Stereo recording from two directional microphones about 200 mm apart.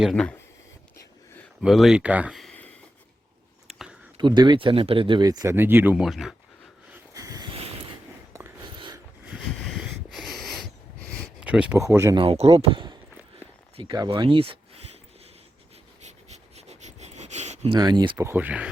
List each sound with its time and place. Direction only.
0.0 s speech: 5° left (ahead or behind)
1.6 s speech: centre (ahead or behind)
3.7 s a sound: centre (ahead or behind)
4.2 s speech: 20° right (ahead or behind); by 6.3 s centre (ahead or behind)
6.9 s a sound: 15° right (ahead or behind)
8.3 s writing: 10° right (ahead or behind)
9.2 s wheeze: centre (ahead or behind)
11.3 s speech: 5° right (ahead or behind)
12.2 s speech: 30° right (ahead or behind)
16.0 s a sound: 35° right (ahead or behind)
17.7 s speech: 20° right (ahead or behind)
18.3 s speech: 10° right (ahead or behind)